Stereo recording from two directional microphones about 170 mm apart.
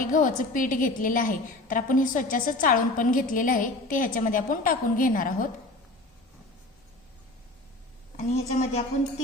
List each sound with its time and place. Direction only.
0.0 s a woman's voice: 50° left (ahead or behind)
8.1 s a woman's voice: 40° left (ahead or behind)